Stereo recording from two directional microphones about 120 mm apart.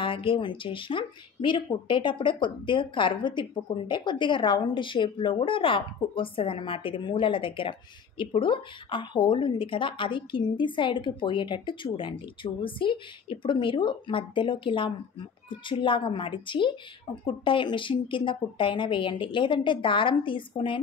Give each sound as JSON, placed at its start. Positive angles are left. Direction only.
{"t": 0.0, "sound": "speech", "side_deg": 45}